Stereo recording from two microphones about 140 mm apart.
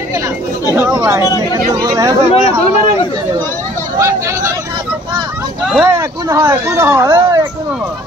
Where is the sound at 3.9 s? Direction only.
20° right (ahead or behind).